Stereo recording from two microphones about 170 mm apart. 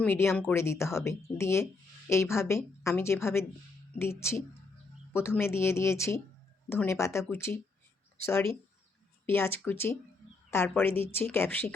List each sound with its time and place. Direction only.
0.0 s speech: 15° left (ahead or behind)